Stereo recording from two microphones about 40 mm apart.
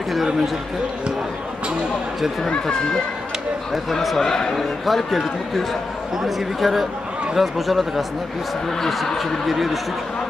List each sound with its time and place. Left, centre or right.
2.6 s speech: centre
3.7 s a man's voice: centre
4.3 s speech: centre
4.8 s a man's voice: centre
9.2 s a man's voice: centre